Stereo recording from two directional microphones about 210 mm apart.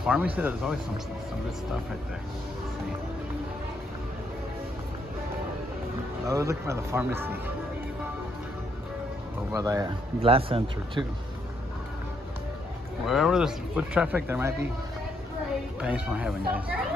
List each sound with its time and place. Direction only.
0.0 s speech: 5° right (ahead or behind)
6.2 s speech: 15° right (ahead or behind)
9.5 s speech: 15° right (ahead or behind)
10.2 s speech: 25° right (ahead or behind)
13.0 s speech: centre (ahead or behind)
15.8 s speech: 5° right (ahead or behind)